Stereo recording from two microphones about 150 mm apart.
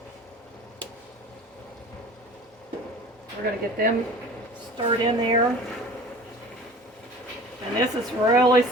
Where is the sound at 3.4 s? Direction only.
90° right.